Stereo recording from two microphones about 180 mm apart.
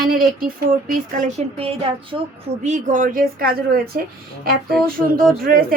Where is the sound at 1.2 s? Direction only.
40° right (ahead or behind).